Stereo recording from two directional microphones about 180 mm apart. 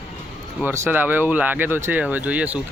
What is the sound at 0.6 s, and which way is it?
Speech, 10° right (ahead or behind).